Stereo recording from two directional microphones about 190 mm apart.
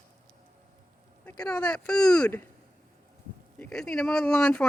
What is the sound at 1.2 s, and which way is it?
Speech, 5° left (ahead or behind).